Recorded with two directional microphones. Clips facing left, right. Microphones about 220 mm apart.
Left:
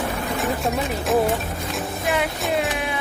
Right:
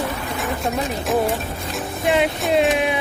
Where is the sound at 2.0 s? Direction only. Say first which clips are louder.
Right 6 dB; 20° right (ahead or behind).